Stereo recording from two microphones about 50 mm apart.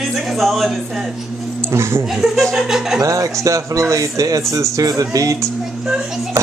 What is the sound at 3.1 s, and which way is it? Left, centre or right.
Speech, right.